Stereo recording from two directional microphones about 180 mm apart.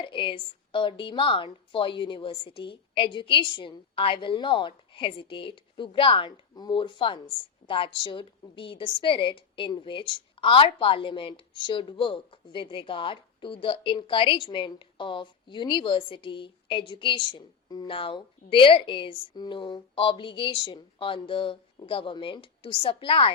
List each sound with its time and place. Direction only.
0.0 s a woman's voice: 30° left (ahead or behind)